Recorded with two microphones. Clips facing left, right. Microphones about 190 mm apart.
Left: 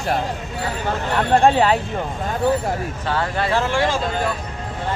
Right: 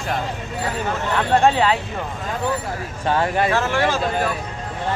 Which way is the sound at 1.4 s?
40° left (ahead or behind).